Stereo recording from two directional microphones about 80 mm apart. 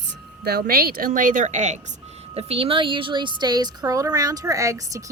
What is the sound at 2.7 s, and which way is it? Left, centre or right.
A woman's voice, right.